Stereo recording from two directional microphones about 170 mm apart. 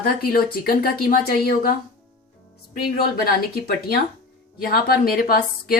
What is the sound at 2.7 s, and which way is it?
Speech, 60° left (ahead or behind).